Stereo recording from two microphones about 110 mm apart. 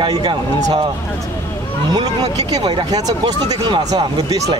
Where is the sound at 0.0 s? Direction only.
40° right (ahead or behind).